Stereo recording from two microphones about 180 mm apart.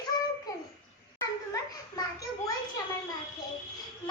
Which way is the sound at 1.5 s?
20° left (ahead or behind).